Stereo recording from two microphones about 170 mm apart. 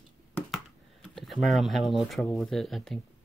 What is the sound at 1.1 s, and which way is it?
Speech, centre (ahead or behind).